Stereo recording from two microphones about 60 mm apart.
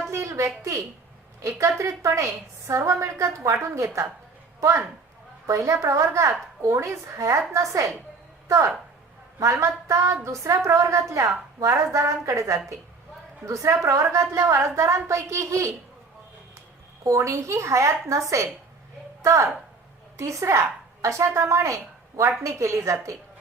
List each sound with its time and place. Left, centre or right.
0.1 s a sound: right
1.4 s a woman's voice: right
5.5 s a woman's voice: right
17.0 s a woman's voice: right